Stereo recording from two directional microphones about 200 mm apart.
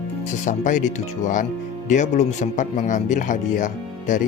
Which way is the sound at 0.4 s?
40° left (ahead or behind).